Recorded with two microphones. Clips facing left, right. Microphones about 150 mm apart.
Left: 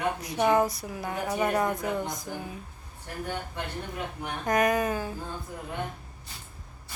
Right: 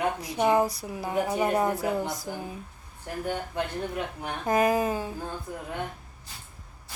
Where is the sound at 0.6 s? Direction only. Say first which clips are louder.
Even; 25° right (ahead or behind).